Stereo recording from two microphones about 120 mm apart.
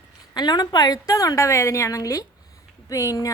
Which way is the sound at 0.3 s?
35° left (ahead or behind).